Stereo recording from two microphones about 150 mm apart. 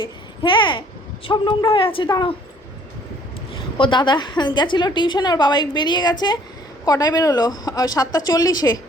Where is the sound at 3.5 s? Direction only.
30° left (ahead or behind).